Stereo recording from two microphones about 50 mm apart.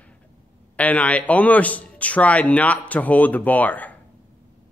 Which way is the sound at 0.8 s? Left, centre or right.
Left.